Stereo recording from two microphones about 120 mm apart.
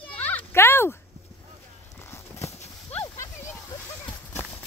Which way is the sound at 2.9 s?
15° left (ahead or behind).